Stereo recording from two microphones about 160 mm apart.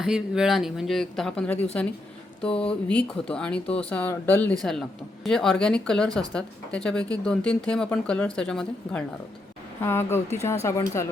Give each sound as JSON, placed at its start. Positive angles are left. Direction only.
{"t": 0.0, "sound": "speech", "side_deg": 0}